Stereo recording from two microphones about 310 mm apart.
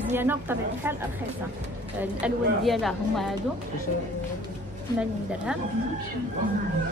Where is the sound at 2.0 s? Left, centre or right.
Centre.